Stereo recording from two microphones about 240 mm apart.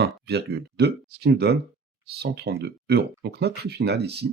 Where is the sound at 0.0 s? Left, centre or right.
Right.